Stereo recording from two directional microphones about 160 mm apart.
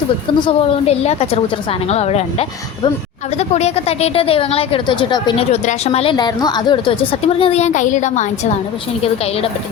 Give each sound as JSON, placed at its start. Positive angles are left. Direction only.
{"t": 0.3, "sound": "a woman's voice", "side_deg": 35}
{"t": 5.5, "sound": "a woman's voice", "side_deg": 40}